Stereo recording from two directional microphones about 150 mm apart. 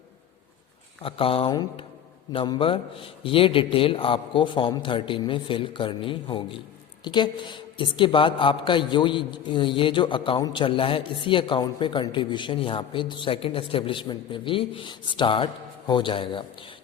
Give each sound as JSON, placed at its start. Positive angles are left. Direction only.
{"t": 1.0, "sound": "a woman's voice", "side_deg": 40}